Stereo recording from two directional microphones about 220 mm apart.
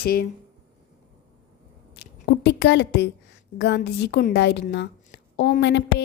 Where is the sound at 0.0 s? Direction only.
45° left (ahead or behind).